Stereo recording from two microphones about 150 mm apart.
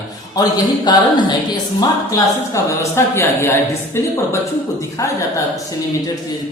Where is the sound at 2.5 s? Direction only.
20° left (ahead or behind).